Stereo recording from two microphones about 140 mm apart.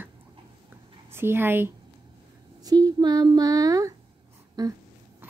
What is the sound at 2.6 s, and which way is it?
Speech, 30° right (ahead or behind).